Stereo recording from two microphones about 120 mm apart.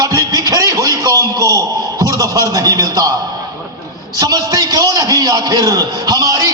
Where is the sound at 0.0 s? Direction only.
30° right (ahead or behind).